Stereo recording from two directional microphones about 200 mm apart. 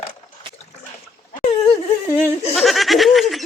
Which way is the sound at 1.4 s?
30° left (ahead or behind).